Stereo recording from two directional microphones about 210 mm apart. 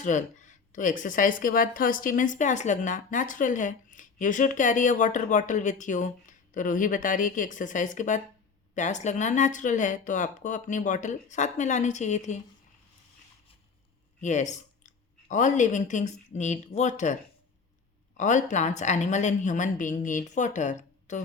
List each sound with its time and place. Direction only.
0.0 s speech: 35° left (ahead or behind)
14.2 s speech: 35° left (ahead or behind)
18.2 s speech: 35° left (ahead or behind)